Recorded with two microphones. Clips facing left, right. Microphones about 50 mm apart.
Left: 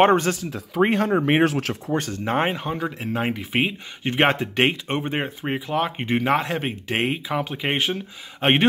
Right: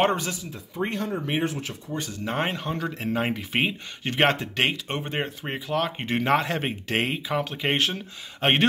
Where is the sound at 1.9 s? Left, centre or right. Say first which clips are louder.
Left 5 dB; left.